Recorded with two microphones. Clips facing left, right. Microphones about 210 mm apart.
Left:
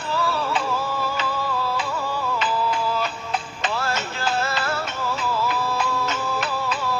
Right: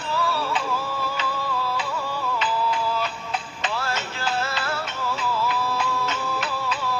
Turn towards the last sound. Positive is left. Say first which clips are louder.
# left 2 dB
turn(degrees=45)  # may be behind; listen again after turning